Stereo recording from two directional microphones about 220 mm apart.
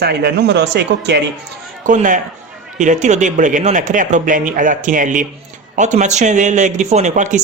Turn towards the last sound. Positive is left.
turn(degrees=-35)  # may be behind; listen again after turning